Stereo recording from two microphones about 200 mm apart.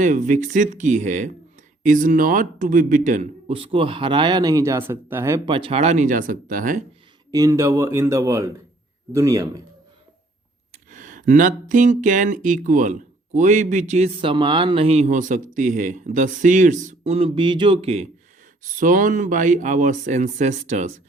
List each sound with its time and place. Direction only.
0.0 s a man's voice: 40° right (ahead or behind); by 5.4 s 10° right (ahead or behind)
5.5 s speech: 25° right (ahead or behind); by 6.8 s 40° right (ahead or behind)
7.3 s speech: 15° right (ahead or behind)
10.7 s speech: 40° right (ahead or behind)